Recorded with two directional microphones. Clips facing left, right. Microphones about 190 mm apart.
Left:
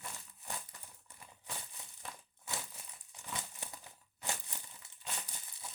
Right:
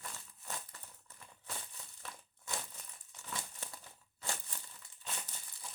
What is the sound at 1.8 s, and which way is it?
Crushing, 20° left (ahead or behind).